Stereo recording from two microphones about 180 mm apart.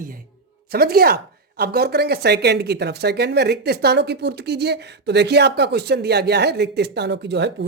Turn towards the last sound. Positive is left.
turn(degrees=-75)  # may be behind; listen again after turning